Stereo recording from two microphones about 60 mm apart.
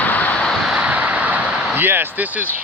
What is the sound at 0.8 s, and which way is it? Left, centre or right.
Vehicle, right.